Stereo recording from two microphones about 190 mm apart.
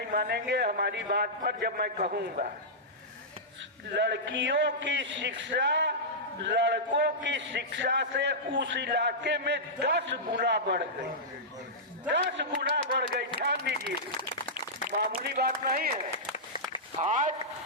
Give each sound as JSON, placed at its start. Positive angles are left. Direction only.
{"t": 0.1, "sound": "a man's voice", "side_deg": -55}
{"t": 3.9, "sound": "a man's voice", "side_deg": -65}
{"t": 12.0, "sound": "a man's voice", "side_deg": -70}
{"t": 14.5, "sound": "a man's voice", "side_deg": -50}
{"t": 16.1, "sound": "applause", "side_deg": 30}
{"t": 17.0, "sound": "speech", "side_deg": -40}